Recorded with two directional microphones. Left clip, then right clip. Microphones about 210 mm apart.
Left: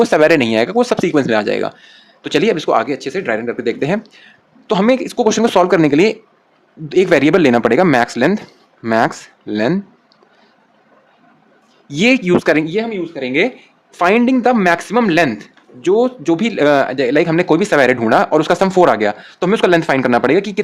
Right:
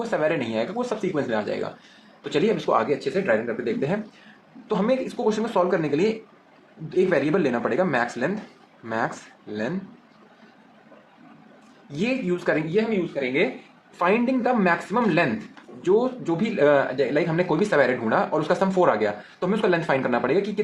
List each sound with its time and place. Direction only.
0.1 s speech: 55° left (ahead or behind)
4.7 s speech: 50° left (ahead or behind)
11.9 s speech: 55° left (ahead or behind)
15.8 s speech: 45° left (ahead or behind)